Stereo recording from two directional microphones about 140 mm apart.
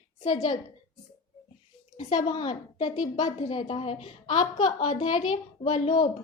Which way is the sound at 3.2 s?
50° left (ahead or behind).